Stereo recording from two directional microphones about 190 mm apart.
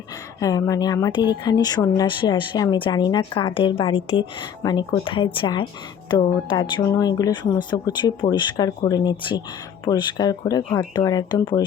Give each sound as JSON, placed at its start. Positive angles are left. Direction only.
{"t": 0.3, "sound": "speech", "side_deg": 20}